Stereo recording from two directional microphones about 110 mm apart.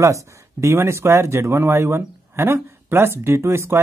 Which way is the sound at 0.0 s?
25° right (ahead or behind).